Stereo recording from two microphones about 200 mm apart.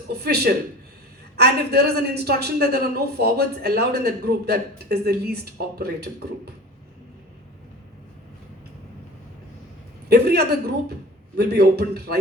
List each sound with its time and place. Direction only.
0.1 s speech: 55° right (ahead or behind)
10.1 s a man's voice: 50° right (ahead or behind)